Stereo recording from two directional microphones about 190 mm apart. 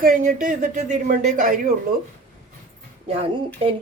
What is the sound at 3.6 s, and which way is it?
Speech, 30° right (ahead or behind).